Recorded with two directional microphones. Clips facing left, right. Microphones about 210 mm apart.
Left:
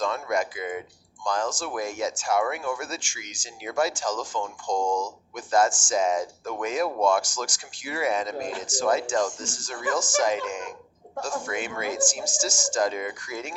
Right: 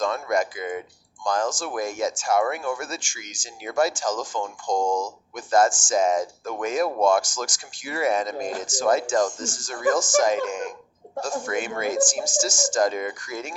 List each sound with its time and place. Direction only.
0.0 s speech: 45° right (ahead or behind)